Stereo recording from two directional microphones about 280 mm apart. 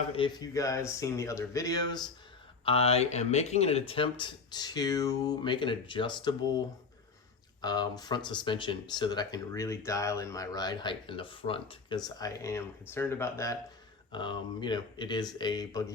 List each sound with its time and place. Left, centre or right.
0.1 s speech: centre
7.6 s speech: centre